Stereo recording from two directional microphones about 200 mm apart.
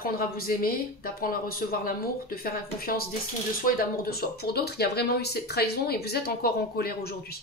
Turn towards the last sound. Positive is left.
turn(degrees=50)  # may be behind; listen again after turning